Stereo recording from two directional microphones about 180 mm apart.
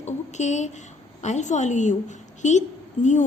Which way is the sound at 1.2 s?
40° left (ahead or behind).